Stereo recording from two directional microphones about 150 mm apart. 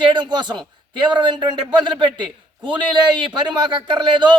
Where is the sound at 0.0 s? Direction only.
30° right (ahead or behind).